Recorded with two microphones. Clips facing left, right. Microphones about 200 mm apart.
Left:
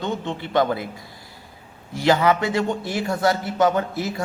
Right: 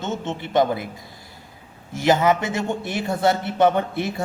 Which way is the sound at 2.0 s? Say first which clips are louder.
Even; 20° right (ahead or behind).